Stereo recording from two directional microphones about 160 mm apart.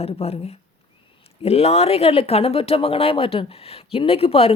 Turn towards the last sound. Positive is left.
turn(degrees=40)  # may be behind; listen again after turning